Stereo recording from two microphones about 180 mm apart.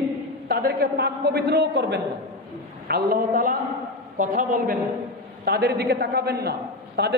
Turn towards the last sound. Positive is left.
turn(degrees=-65)  # may be behind; listen again after turning